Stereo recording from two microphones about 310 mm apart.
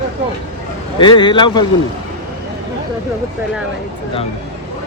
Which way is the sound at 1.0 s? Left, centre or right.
Centre.